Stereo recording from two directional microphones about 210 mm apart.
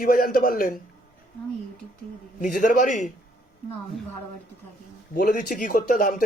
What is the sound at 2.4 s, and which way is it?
Speech, 40° left (ahead or behind).